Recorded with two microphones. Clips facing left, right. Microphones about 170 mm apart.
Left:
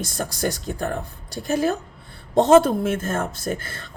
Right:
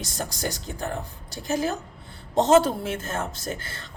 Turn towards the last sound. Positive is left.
turn(degrees=55)  # may be behind; listen again after turning